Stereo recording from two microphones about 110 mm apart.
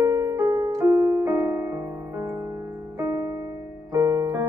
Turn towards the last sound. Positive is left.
turn(degrees=-30)  # may be behind; listen again after turning